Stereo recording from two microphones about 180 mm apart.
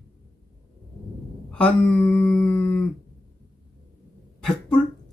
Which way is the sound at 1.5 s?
10° left (ahead or behind).